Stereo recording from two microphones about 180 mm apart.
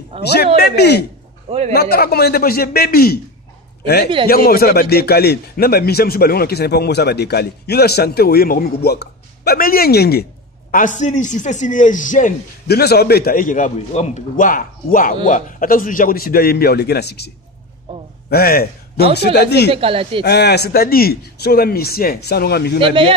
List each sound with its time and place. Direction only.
0.1 s speech: 30° right (ahead or behind)
0.6 s speech: 65° left (ahead or behind)
10.7 s a man's voice: 45° left (ahead or behind); by 17.3 s 65° left (ahead or behind)
18.3 s speech: 55° left (ahead or behind)
19.7 s speech: 30° right (ahead or behind)
20.2 s speech: 65° left (ahead or behind)